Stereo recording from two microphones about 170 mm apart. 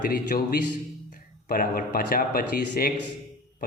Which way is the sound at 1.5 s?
60° left (ahead or behind).